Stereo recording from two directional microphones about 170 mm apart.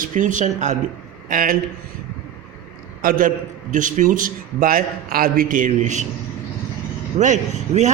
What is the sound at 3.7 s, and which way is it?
A man's voice, 50° right (ahead or behind).